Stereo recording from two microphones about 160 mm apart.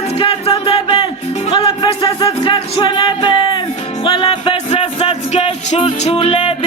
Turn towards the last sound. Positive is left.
turn(degrees=40)  # may be behind; listen again after turning